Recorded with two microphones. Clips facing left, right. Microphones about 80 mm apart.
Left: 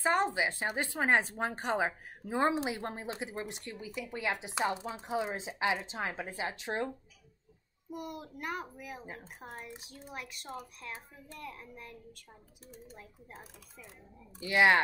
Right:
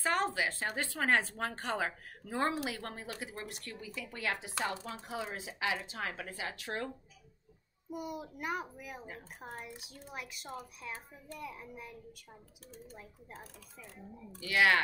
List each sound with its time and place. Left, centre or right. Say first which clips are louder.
0.0 s speech: left 3 dB; left
7.9 s a child's voice: right 1 dB; centre
9.0 s speech: left 1 dB; left
9.4 s a child's voice: even; centre
13.3 s speech: right 1 dB; centre
14.4 s speech: left 3 dB; left